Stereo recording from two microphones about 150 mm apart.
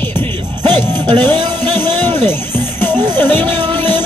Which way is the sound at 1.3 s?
30° right (ahead or behind).